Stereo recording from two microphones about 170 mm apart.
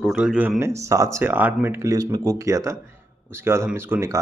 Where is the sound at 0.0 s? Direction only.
5° right (ahead or behind).